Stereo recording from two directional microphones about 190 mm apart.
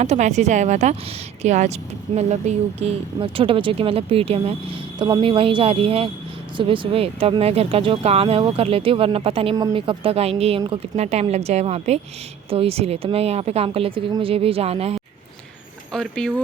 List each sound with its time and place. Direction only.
0.0 s speech: 35° right (ahead or behind)
15.9 s speech: 5° left (ahead or behind)